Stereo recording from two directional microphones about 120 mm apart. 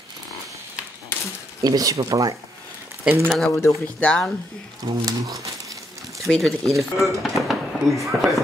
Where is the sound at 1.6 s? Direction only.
30° right (ahead or behind).